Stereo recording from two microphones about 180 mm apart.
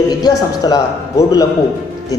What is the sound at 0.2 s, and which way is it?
Speech, 20° left (ahead or behind).